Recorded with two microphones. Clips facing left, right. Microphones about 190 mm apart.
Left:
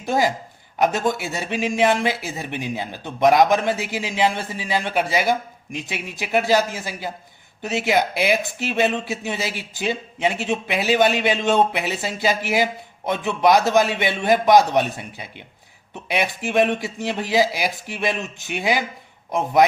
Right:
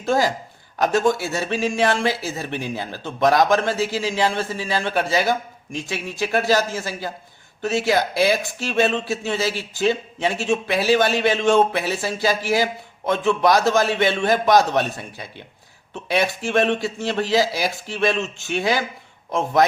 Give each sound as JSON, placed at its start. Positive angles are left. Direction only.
{"t": 0.0, "sound": "speech", "side_deg": 20}